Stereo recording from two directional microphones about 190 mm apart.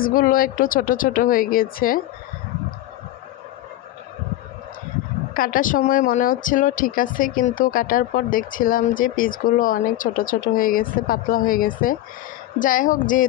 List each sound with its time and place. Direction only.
0.0 s speech: 50° left (ahead or behind)
5.3 s speech: 45° left (ahead or behind)